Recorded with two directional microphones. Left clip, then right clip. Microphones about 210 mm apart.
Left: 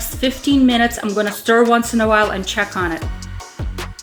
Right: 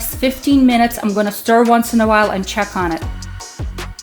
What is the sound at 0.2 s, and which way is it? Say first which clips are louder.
Speech: right 2 dB; 35° right (ahead or behind).